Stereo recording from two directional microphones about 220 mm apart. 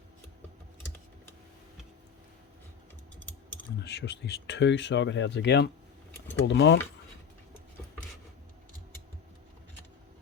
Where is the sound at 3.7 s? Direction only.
50° left (ahead or behind).